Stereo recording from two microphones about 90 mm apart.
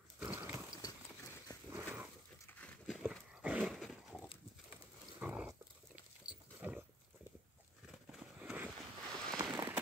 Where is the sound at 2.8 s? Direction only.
10° right (ahead or behind).